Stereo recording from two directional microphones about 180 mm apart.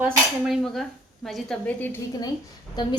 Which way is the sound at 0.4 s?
Centre (ahead or behind).